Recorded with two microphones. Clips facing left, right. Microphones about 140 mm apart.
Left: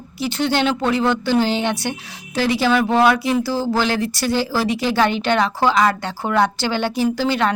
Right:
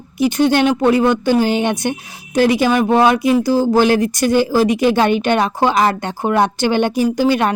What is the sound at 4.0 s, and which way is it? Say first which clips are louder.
Speech: right 5 dB; 50° right (ahead or behind).